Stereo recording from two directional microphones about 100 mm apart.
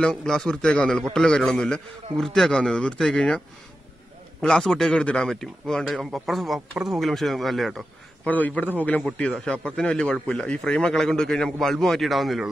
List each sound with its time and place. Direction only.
0.0 s a man's voice: 5° left (ahead or behind)
8.3 s a man's voice: 15° left (ahead or behind); by 12.4 s centre (ahead or behind)